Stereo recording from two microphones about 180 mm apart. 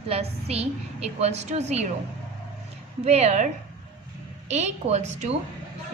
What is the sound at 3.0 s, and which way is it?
Speech, 35° right (ahead or behind).